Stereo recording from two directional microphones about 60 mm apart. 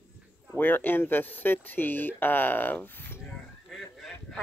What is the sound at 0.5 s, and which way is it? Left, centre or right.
Speech, left.